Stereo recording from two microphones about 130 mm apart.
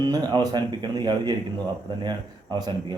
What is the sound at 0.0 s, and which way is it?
Speech, 35° right (ahead or behind).